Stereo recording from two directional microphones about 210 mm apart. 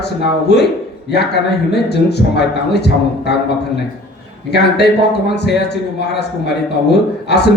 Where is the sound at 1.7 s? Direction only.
50° left (ahead or behind).